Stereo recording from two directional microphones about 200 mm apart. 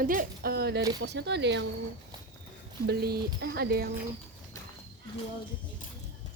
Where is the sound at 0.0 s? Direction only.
45° right (ahead or behind); by 1.6 s 60° right (ahead or behind).